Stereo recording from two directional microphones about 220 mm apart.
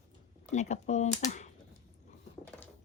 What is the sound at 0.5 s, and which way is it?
Speech, 30° left (ahead or behind).